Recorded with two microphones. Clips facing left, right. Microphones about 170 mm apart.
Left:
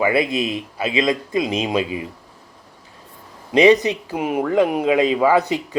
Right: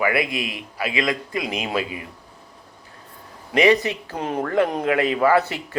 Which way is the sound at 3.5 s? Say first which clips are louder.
Left 4 dB; 20° left (ahead or behind).